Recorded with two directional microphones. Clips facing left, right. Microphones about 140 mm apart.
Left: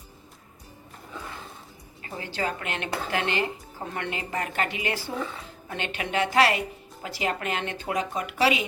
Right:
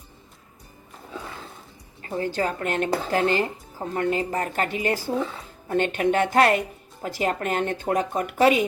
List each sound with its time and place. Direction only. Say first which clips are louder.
2.0 s a woman's voice: right 5 dB; 45° right (ahead or behind)